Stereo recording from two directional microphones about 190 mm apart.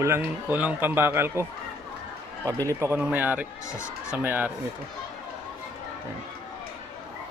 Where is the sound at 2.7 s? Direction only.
15° right (ahead or behind).